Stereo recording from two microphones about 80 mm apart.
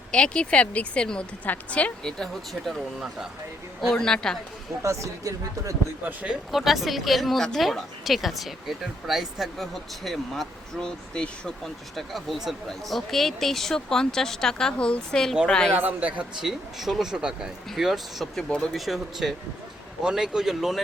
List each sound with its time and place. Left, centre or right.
0.1 s a woman's voice: centre
4.8 s speech: right
6.5 s a woman's voice: centre
11.9 s a woman's voice: centre
15.8 s speech: centre
16.4 s a woman's voice: centre
18.4 s speech: centre
18.7 s a woman's voice: centre